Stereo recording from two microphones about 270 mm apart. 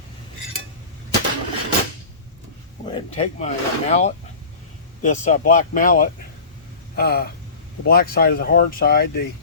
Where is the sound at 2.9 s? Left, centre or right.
Left.